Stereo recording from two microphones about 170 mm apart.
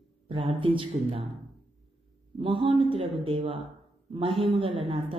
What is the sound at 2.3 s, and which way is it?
A woman's voice, 30° right (ahead or behind).